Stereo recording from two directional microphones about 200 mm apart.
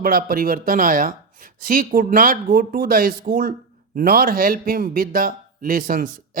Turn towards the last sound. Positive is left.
turn(degrees=-45)  # may be behind; listen again after turning